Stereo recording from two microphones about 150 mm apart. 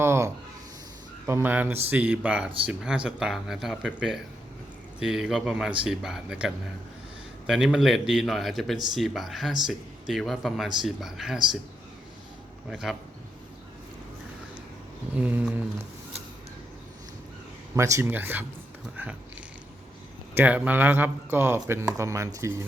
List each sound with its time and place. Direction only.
0.0 s a sound: 15° right (ahead or behind)
1.3 s speech: 15° right (ahead or behind)
12.7 s speech: centre (ahead or behind)
15.1 s speech: 10° right (ahead or behind)
17.7 s speech: 20° right (ahead or behind)
20.3 s speech: 10° right (ahead or behind)